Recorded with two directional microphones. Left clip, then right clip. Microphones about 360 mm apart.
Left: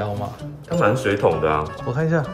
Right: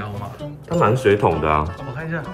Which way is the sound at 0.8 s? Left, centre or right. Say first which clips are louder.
Right 2 dB; centre.